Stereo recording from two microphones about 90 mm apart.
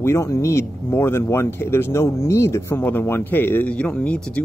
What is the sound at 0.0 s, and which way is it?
Speech, 30° left (ahead or behind).